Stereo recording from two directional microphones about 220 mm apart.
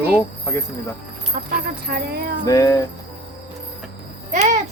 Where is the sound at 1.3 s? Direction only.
40° right (ahead or behind).